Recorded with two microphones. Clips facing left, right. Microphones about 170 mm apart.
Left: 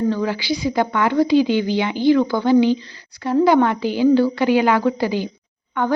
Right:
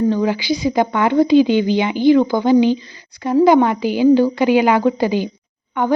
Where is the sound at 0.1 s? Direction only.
15° right (ahead or behind).